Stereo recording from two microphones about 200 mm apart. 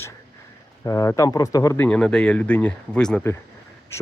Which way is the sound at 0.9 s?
15° left (ahead or behind).